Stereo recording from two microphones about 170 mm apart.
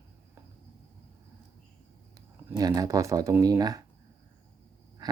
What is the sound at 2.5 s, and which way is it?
Speech, 20° right (ahead or behind).